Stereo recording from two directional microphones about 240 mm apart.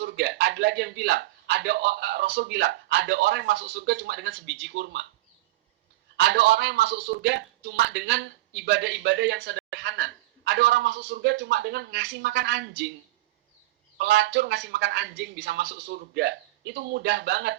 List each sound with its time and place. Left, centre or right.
0.0 s a man's voice: right
6.1 s a man's voice: right
14.0 s a man's voice: right